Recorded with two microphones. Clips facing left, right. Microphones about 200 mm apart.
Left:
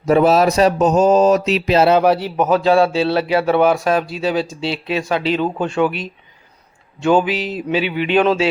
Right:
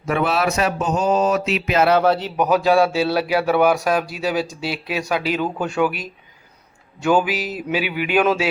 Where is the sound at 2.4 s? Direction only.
10° right (ahead or behind).